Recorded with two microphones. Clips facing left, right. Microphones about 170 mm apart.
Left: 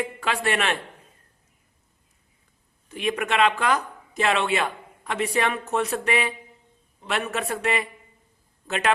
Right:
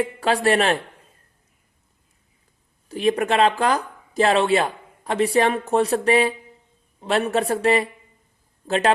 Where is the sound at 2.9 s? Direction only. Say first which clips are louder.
Right 6 dB; 35° right (ahead or behind).